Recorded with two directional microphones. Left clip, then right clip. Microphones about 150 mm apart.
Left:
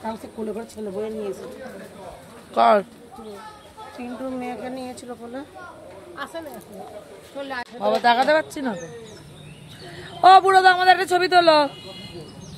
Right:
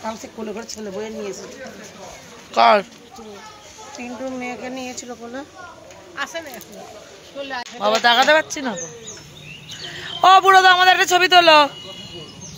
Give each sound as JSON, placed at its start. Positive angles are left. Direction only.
{"t": 0.0, "sound": "a woman's voice", "side_deg": -30}
{"t": 2.5, "sound": "speech", "side_deg": 10}
{"t": 4.0, "sound": "a woman's voice", "side_deg": -30}
{"t": 6.1, "sound": "speech", "side_deg": -10}
{"t": 7.8, "sound": "speech", "side_deg": -5}
{"t": 9.8, "sound": "a man's voice", "side_deg": 0}